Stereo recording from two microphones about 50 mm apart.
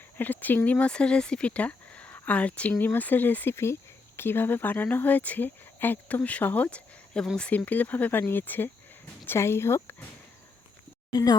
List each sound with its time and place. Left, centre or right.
0.2 s speech: left
3.5 s speech: left
4.2 s speech: left
6.7 s speech: left
7.5 s speech: left
9.2 s speech: left